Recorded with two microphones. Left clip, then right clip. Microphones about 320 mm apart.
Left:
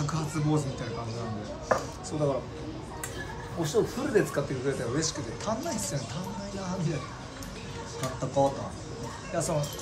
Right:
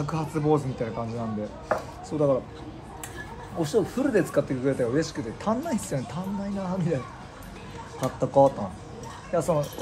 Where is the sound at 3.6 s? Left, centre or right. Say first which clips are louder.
Right 3 dB; right.